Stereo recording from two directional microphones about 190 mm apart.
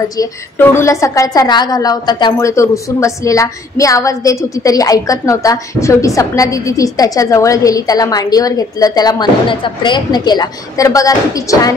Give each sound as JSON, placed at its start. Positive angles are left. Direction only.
{"t": 0.2, "sound": "a woman's voice", "side_deg": 15}